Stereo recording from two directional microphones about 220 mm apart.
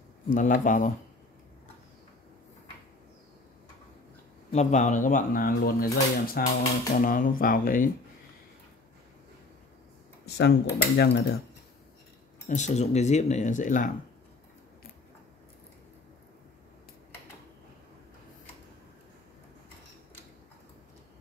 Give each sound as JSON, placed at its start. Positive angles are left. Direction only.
{"t": 0.3, "sound": "speech", "side_deg": 35}
{"t": 4.5, "sound": "speech", "side_deg": 30}
{"t": 10.3, "sound": "speech", "side_deg": 50}
{"t": 12.4, "sound": "speech", "side_deg": 30}